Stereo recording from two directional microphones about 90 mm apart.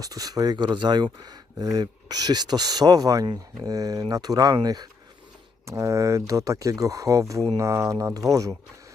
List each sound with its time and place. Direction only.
0.0 s speech: 40° right (ahead or behind)
5.6 s speech: 35° right (ahead or behind)